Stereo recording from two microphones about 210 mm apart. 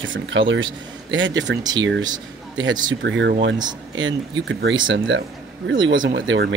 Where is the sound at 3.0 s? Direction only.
60° right (ahead or behind).